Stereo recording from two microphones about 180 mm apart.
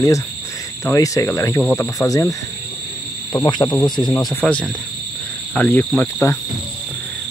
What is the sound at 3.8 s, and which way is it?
Speech, 25° left (ahead or behind).